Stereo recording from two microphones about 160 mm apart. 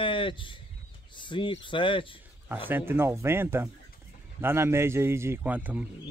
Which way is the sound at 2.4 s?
15° right (ahead or behind).